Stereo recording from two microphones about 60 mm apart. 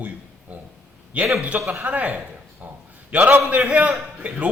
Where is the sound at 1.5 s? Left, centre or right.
Right.